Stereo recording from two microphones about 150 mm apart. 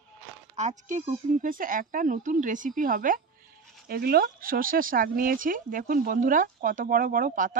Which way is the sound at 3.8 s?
90° right.